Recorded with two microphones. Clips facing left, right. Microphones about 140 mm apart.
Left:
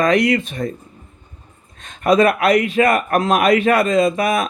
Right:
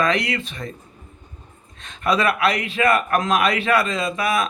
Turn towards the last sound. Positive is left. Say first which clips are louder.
# left 6 dB
turn(degrees=40)  # may be behind; listen again after turning